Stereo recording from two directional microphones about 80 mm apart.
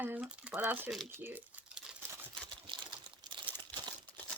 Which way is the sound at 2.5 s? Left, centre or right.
Right.